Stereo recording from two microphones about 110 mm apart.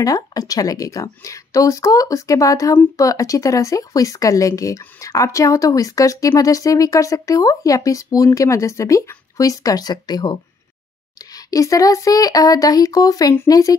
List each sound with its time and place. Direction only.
0.0 s speech: 35° left (ahead or behind)
11.3 s speech: 30° left (ahead or behind)